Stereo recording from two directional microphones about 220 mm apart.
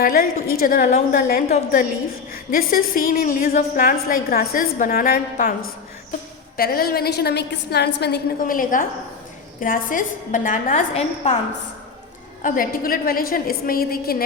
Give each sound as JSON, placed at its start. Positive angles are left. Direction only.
{"t": 0.0, "sound": "a woman's voice", "side_deg": 40}
{"t": 6.6, "sound": "a woman's voice", "side_deg": 45}
{"t": 12.4, "sound": "a woman's voice", "side_deg": 40}